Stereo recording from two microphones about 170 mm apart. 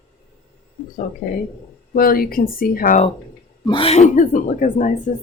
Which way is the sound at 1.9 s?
60° left (ahead or behind).